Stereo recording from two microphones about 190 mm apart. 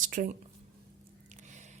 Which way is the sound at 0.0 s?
45° right (ahead or behind).